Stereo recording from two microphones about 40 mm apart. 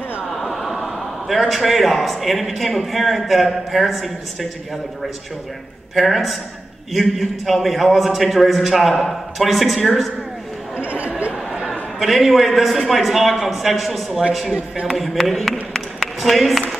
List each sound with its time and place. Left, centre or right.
0.3 s a man's voice: centre
5.9 s a man's voice: centre
10.8 s chatter: right
11.3 s a sound: centre
12.0 s a man's voice: centre
15.7 s a sound: centre